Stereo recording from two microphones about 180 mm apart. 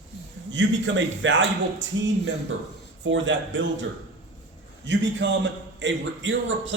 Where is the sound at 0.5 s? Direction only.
90° right.